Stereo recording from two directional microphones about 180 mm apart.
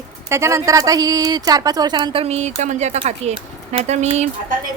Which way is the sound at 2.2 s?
40° right (ahead or behind).